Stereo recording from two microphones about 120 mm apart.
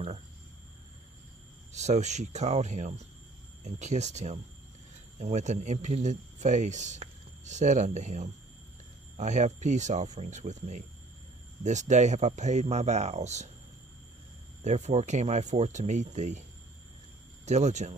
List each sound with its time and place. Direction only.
1.7 s speech: 75° right (ahead or behind)
14.6 s speech: 75° right (ahead or behind)
17.5 s speech: 75° right (ahead or behind)